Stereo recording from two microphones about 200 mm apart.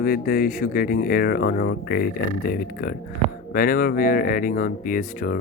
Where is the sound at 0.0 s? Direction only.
50° left (ahead or behind).